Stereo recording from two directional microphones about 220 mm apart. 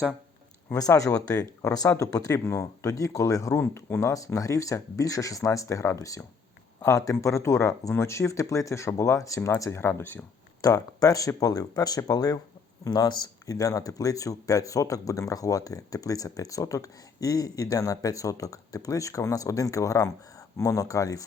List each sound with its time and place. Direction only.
0.7 s speech: 15° left (ahead or behind)